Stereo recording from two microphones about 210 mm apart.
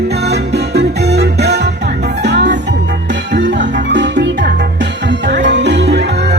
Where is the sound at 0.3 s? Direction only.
50° right (ahead or behind).